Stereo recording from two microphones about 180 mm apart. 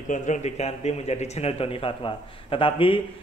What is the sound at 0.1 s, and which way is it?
Speech, 40° left (ahead or behind).